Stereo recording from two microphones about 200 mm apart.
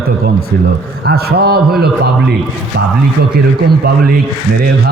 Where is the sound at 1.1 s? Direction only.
50° right (ahead or behind).